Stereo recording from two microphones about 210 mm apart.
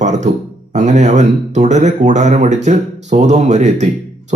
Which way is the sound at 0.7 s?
35° right (ahead or behind).